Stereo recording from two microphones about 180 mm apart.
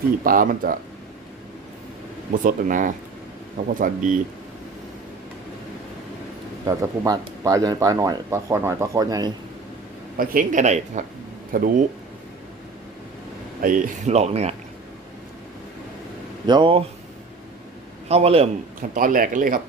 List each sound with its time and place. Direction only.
0.3 s speech: 50° right (ahead or behind)
2.4 s speech: 50° right (ahead or behind)
6.7 s speech: 20° right (ahead or behind)
10.2 s speech: 50° right (ahead or behind)
13.6 s speech: 50° right (ahead or behind)
16.5 s speech: 25° right (ahead or behind)
18.1 s speech: 35° right (ahead or behind)
18.9 s speech: 50° right (ahead or behind)